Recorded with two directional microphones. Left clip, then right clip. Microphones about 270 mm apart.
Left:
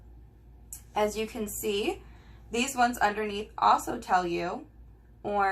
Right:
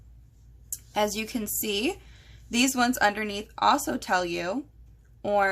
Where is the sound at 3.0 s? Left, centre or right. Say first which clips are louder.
Right 3 dB; right.